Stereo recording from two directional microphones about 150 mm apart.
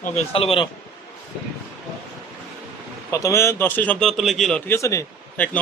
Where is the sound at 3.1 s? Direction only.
20° left (ahead or behind); by 4.6 s centre (ahead or behind).